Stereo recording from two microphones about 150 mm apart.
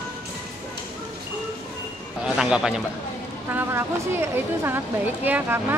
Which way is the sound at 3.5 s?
15° right (ahead or behind).